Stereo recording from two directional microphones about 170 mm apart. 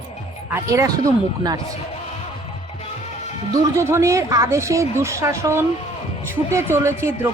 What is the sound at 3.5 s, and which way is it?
Speech, 15° right (ahead or behind).